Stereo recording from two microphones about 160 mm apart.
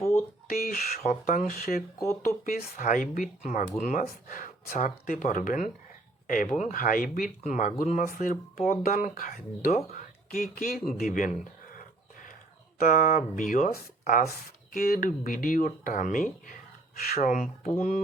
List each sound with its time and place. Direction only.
0.0 s a sound: 15° left (ahead or behind)
0.4 s speech: 65° left (ahead or behind)
1.0 s speech: 55° left (ahead or behind)
11.7 s dog: 60° left (ahead or behind)
12.8 s speech: 60° left (ahead or behind)